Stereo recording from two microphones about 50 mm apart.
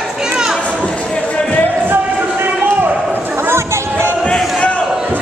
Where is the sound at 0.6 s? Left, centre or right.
Left.